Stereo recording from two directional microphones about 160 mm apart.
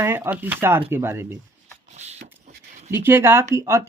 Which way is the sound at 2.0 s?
45° right (ahead or behind).